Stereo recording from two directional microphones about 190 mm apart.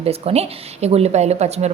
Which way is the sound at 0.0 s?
30° right (ahead or behind).